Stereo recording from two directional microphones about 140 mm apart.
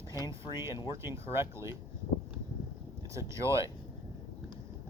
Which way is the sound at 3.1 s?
20° right (ahead or behind).